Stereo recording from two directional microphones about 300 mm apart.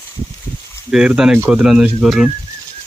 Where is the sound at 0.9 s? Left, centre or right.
Centre.